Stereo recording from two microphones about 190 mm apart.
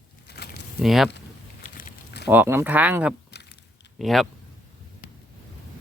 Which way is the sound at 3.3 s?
60° left (ahead or behind).